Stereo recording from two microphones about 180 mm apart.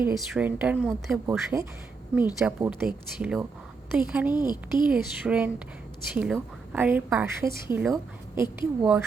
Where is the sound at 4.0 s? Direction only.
5° right (ahead or behind).